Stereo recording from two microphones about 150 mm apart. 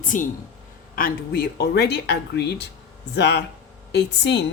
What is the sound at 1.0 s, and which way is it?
Speech, 80° left.